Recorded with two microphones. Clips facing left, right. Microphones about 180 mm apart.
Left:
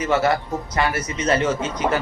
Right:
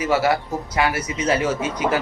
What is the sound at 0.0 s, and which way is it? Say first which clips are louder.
Speech: even; 5° right (ahead or behind).